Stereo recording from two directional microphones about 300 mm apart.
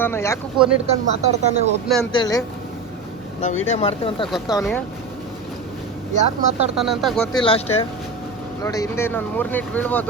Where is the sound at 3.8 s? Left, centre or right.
Centre.